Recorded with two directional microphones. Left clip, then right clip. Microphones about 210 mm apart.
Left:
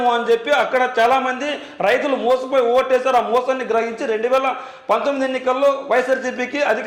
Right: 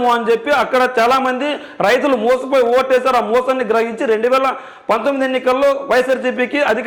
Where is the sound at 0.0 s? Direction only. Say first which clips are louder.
Right 2 dB; 35° right (ahead or behind).